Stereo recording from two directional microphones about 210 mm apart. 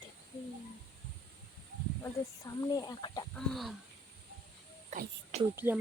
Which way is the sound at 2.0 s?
15° left (ahead or behind).